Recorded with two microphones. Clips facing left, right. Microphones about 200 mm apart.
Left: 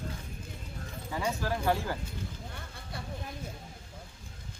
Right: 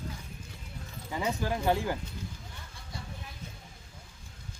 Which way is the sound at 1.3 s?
15° right (ahead or behind).